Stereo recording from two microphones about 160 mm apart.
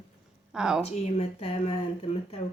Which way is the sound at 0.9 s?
40° left (ahead or behind).